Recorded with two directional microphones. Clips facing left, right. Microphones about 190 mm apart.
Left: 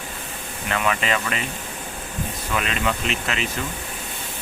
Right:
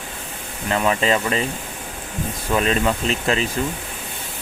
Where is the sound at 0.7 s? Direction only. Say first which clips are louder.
Right 4 dB; 30° right (ahead or behind).